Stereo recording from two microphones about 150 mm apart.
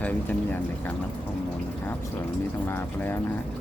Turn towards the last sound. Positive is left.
turn(degrees=15)  # may be behind; listen again after turning